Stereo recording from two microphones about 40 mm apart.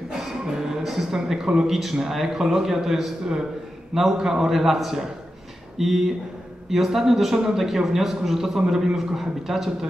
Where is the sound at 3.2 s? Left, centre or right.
Centre.